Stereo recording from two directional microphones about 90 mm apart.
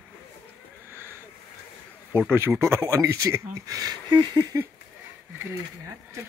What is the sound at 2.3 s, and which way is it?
Speech, 25° right (ahead or behind).